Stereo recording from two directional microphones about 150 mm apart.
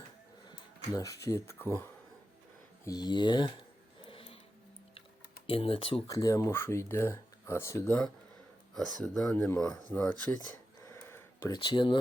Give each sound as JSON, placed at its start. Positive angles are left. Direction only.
{"t": 0.9, "sound": "speech", "side_deg": 20}
{"t": 2.8, "sound": "speech", "side_deg": 25}
{"t": 4.0, "sound": "a sound", "side_deg": 35}
{"t": 5.5, "sound": "speech", "side_deg": 35}
{"t": 6.1, "sound": "speech", "side_deg": 20}
{"t": 8.7, "sound": "speech", "side_deg": 0}
{"t": 10.8, "sound": "a sound", "side_deg": 20}
{"t": 11.5, "sound": "speech", "side_deg": 30}